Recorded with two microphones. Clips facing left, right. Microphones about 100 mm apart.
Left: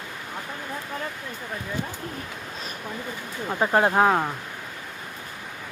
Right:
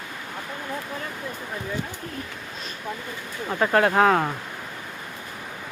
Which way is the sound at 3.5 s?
20° left (ahead or behind).